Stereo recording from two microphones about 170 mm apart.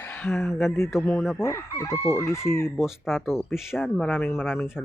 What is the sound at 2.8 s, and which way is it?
Speech, centre (ahead or behind).